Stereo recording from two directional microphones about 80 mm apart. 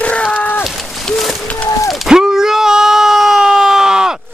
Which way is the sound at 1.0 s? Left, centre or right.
Centre.